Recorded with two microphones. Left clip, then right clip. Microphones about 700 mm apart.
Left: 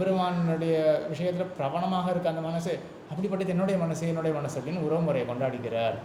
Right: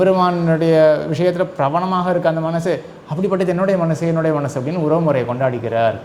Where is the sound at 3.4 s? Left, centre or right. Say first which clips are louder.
Right 11 dB; right.